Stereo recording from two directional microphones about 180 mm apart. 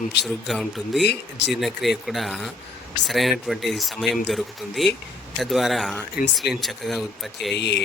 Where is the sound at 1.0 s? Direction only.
70° left (ahead or behind).